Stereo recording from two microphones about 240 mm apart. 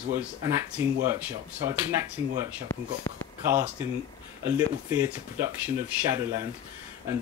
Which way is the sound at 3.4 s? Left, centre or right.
Centre.